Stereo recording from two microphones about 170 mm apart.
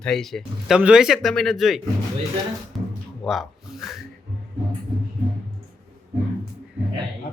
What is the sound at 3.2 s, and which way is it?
Speech, centre (ahead or behind).